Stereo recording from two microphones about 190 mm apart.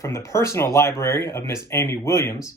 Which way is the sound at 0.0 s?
15° left (ahead or behind).